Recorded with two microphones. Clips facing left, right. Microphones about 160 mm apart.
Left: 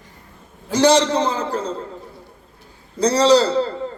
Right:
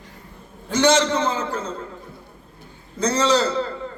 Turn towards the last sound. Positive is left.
turn(degrees=35)  # may be behind; listen again after turning